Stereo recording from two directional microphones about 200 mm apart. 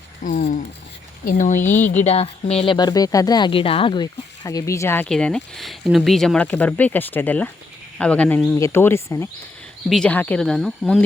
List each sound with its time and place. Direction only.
0.2 s speech: 40° left (ahead or behind)
1.6 s speech: 10° left (ahead or behind)
1.9 s speech: 35° left (ahead or behind); by 11.0 s centre (ahead or behind)